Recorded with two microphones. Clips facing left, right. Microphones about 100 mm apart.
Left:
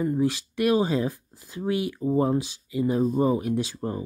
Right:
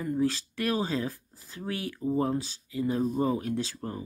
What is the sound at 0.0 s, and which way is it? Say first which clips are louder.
Speech: left 4 dB; 15° left (ahead or behind).